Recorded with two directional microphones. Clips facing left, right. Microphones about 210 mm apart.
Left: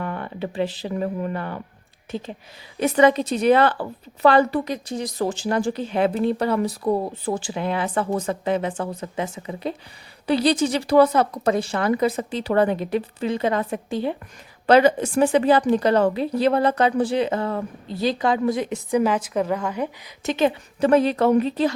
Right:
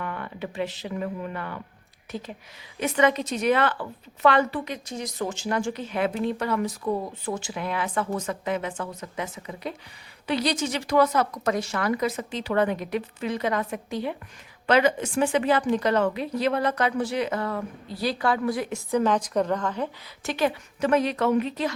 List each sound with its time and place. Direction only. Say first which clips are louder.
0.0 s a woman's voice: left 4 dB; 35° left (ahead or behind)